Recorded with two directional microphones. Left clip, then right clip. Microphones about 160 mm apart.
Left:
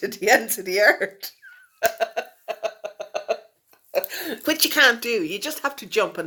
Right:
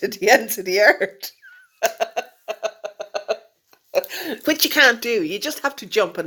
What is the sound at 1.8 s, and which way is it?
Cough, 50° right (ahead or behind).